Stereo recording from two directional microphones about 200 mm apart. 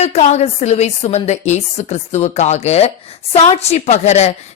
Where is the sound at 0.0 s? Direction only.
35° left (ahead or behind).